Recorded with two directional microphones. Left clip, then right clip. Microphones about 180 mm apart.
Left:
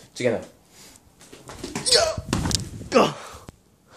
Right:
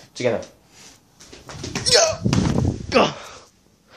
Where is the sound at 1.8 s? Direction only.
20° right (ahead or behind).